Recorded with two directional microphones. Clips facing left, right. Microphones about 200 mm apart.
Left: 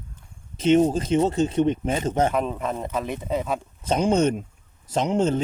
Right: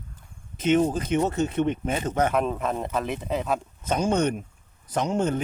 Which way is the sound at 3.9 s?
20° left (ahead or behind).